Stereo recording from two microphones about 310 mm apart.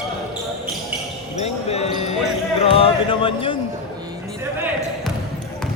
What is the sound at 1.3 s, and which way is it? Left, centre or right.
Basketball bounce, centre.